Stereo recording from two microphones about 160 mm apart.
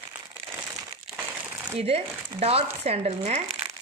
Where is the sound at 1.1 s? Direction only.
10° right (ahead or behind).